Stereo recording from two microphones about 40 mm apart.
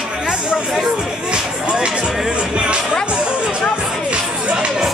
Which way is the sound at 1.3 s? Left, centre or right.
Right.